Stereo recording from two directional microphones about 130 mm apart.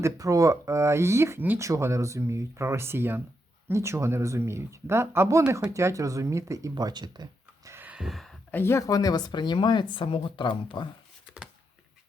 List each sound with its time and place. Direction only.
0.0 s speech: 25° right (ahead or behind)
7.7 s a sound: 15° right (ahead or behind)
8.4 s speech: 15° left (ahead or behind)
8.9 s speech: 30° left (ahead or behind)